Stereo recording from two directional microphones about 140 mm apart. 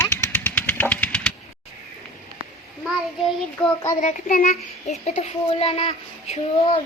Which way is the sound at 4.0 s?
65° left (ahead or behind).